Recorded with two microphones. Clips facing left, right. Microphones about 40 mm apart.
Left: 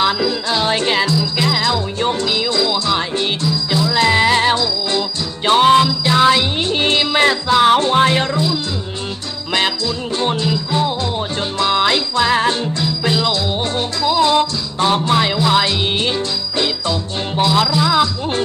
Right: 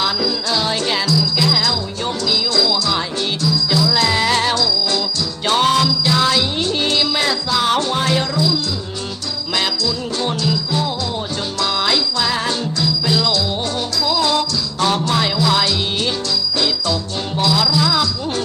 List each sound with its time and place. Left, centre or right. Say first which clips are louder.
0.0 s jingle bell: left 3 dB; left
3.8 s music: left 6 dB; left
9.6 s music: left 2 dB; left
16.6 s jingle bell: left 3 dB; left
17.7 s speech: left 3 dB; left